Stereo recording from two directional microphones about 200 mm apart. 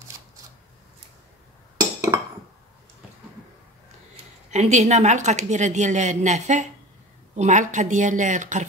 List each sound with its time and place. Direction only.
1.8 s chink: 15° right (ahead or behind)
4.5 s a woman's voice: 35° right (ahead or behind)